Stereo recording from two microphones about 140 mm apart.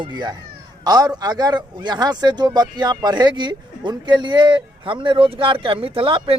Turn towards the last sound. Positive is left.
turn(degrees=-40)  # may be behind; listen again after turning